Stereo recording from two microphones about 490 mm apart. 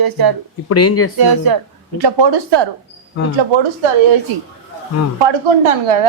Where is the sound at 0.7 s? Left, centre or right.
Left.